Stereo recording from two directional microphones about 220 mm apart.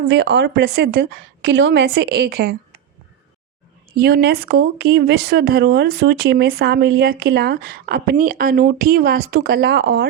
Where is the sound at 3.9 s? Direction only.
45° right (ahead or behind).